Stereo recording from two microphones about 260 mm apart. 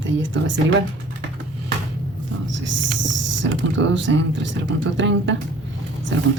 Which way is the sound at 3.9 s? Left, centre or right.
Right.